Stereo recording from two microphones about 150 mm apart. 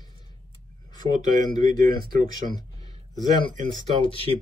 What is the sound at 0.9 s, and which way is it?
Speech, 25° left (ahead or behind).